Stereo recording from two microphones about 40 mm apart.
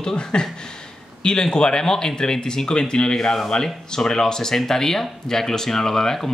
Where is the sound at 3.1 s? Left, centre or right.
Centre.